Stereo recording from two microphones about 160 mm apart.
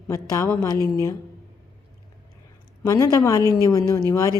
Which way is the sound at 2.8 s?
20° left (ahead or behind).